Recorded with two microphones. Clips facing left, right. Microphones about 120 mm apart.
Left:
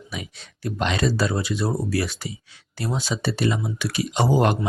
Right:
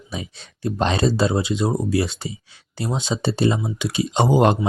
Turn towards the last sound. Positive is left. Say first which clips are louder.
# right 3 dB
turn(degrees=-20)  # may be behind; listen again after turning